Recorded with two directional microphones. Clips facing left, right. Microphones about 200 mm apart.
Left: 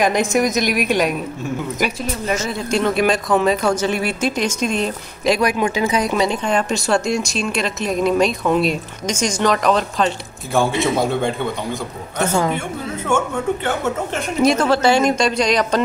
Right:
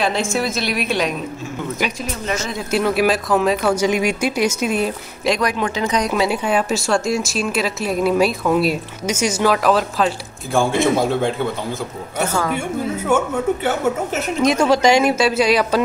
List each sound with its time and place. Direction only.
0.0 s a woman's voice: 15° left (ahead or behind)
2.7 s speech: 5° right (ahead or behind)
5.3 s speech: 10° left (ahead or behind)
12.5 s speech: 10° right (ahead or behind)